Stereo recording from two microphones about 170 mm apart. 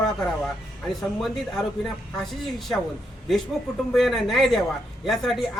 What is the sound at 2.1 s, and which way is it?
Speech, centre (ahead or behind).